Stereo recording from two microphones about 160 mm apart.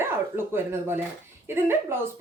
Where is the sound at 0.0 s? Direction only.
15° right (ahead or behind).